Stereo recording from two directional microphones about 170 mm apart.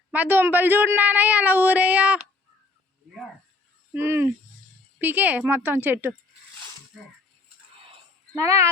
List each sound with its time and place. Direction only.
0.1 s speech: 10° right (ahead or behind)
3.9 s speech: 15° right (ahead or behind)
8.4 s speech: 20° right (ahead or behind)